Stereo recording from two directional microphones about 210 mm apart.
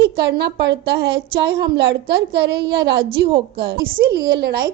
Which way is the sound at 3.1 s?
25° right (ahead or behind).